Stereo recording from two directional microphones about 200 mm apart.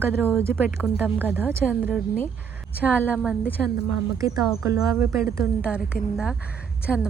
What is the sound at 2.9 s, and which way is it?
Speech, 10° left (ahead or behind).